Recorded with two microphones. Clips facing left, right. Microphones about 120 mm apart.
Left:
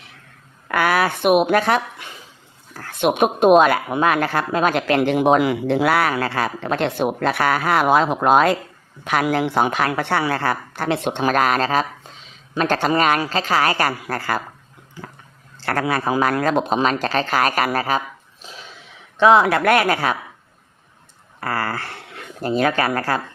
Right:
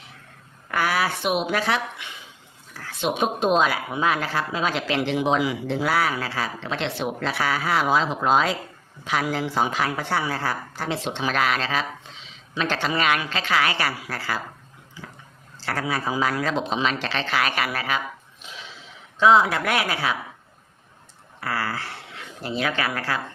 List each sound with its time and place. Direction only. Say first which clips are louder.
0.7 s a woman's voice: left 5 dB; 60° left (ahead or behind)
15.6 s a woman's voice: left 6 dB; 60° left (ahead or behind); by 18.0 s 40° left (ahead or behind)
18.4 s cough: left 2 dB; 35° left (ahead or behind)
19.1 s a woman's voice: left 4 dB; 65° left (ahead or behind)
21.4 s speech: left 4 dB; 50° left (ahead or behind)